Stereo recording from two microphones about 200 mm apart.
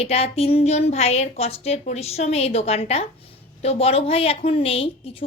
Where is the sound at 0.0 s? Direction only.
30° left (ahead or behind).